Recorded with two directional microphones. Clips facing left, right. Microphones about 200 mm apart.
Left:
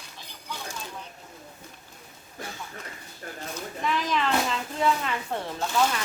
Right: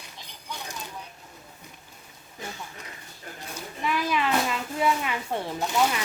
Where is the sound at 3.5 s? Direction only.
10° right (ahead or behind).